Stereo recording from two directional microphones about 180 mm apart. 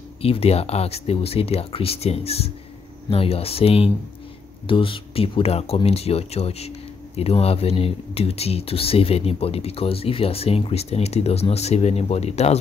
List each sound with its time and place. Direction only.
0.2 s speech: 35° left (ahead or behind)